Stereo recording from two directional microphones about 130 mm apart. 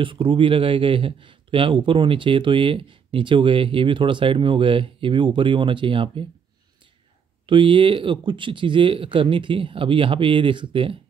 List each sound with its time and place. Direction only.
0.0 s speech: 40° right (ahead or behind)
7.4 s speech: 40° right (ahead or behind)